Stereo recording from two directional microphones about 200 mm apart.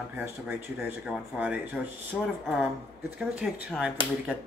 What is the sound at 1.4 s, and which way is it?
Speech, 5° right (ahead or behind).